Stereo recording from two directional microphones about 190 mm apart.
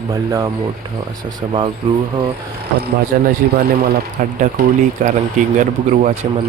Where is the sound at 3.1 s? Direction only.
50° right (ahead or behind).